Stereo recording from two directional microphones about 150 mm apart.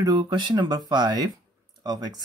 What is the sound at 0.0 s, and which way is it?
Speech, 30° right (ahead or behind).